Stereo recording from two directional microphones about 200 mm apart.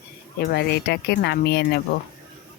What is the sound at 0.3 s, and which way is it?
Speech, 50° left (ahead or behind).